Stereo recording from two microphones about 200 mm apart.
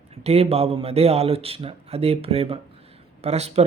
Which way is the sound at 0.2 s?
30° right (ahead or behind).